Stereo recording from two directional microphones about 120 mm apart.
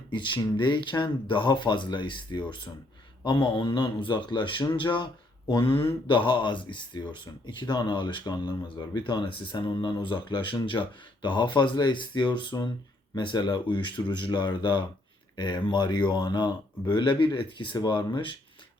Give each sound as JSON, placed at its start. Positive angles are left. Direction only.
{"t": 0.1, "sound": "speech", "side_deg": 40}